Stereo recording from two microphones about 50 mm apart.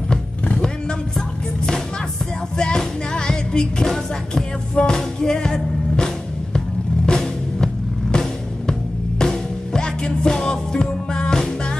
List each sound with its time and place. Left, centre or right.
0.5 s music: centre
2.5 s music: centre